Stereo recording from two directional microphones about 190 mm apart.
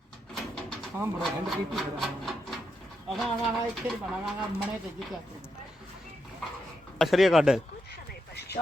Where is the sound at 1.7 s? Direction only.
Centre (ahead or behind).